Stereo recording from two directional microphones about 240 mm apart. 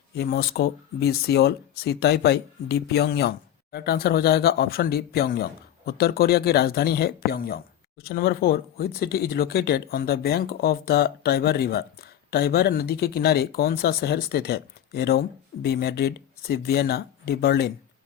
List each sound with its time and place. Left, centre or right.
0.2 s speech: left